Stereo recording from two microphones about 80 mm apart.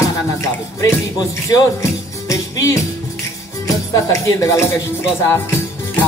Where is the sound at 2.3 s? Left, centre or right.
Left.